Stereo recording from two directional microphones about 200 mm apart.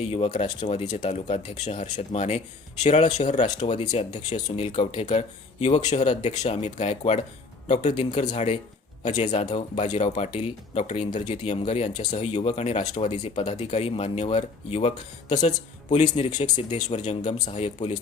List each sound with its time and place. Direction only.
0.0 s speech: 30° left (ahead or behind)
9.3 s speech: 20° left (ahead or behind)
9.6 s speech: 35° left (ahead or behind)
16.4 s speech: 35° left (ahead or behind)